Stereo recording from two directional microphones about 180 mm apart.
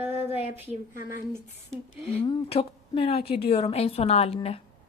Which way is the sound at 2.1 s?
30° left (ahead or behind).